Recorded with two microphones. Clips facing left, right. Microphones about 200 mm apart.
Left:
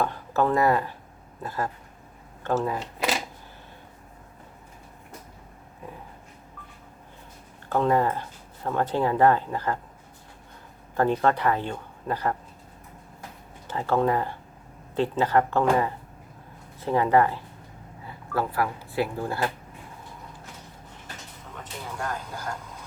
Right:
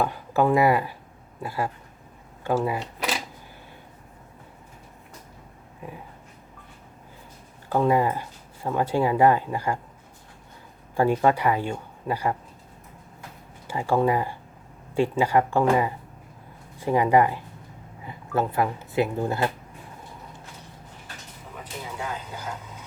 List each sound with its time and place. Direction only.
0.0 s speech: 10° right (ahead or behind)
7.7 s speech: 10° right (ahead or behind)
10.9 s speech: 10° right (ahead or behind)
13.7 s speech: 10° right (ahead or behind)
21.5 s a sound: 5° right (ahead or behind)